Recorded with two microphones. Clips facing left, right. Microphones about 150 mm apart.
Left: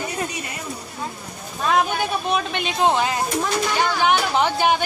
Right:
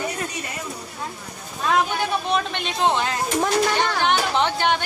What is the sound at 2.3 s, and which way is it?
Speech, 5° left (ahead or behind).